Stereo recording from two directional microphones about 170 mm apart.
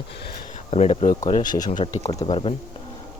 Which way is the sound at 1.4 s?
25° left (ahead or behind).